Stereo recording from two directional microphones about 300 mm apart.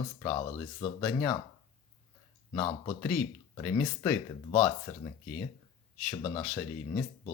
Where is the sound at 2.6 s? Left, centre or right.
Centre.